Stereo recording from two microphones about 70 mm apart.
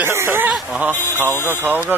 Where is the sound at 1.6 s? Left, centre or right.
Right.